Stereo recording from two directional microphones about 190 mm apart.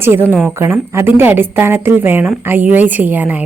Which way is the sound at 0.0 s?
10° right (ahead or behind).